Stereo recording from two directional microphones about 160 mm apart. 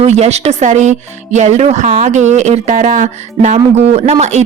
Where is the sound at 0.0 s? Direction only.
45° right (ahead or behind).